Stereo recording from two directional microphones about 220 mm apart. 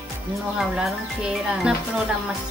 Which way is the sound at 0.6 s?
Centre (ahead or behind).